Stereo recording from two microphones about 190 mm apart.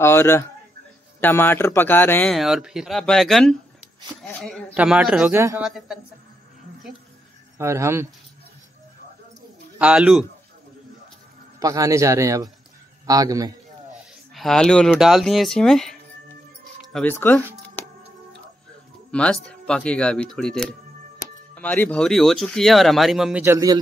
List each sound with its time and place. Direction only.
0.0 s speech: 15° left (ahead or behind)
2.3 s speech: centre (ahead or behind)
7.5 s speech: 15° right (ahead or behind)
9.8 s speech: 5° right (ahead or behind)
11.6 s a man's voice: 15° right (ahead or behind)
14.3 s speech: centre (ahead or behind)
17.8 s music: 10° left (ahead or behind)
19.1 s speech: 5° left (ahead or behind)
23.4 s speech: 15° right (ahead or behind)